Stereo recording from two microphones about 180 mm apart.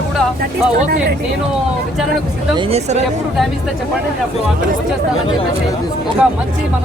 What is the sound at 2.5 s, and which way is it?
Speech, 35° right (ahead or behind).